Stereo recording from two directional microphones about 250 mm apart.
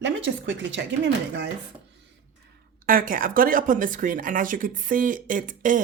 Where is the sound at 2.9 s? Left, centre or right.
Right.